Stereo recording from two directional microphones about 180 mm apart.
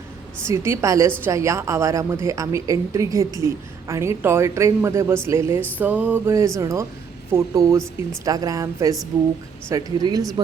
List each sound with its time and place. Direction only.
0.4 s a woman's voice: 15° right (ahead or behind)